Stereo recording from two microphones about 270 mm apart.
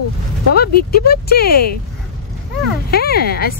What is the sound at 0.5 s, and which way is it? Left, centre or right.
Speech, left.